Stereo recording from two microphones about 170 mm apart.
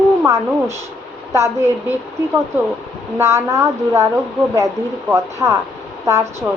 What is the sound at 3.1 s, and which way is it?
Speech, 15° right (ahead or behind).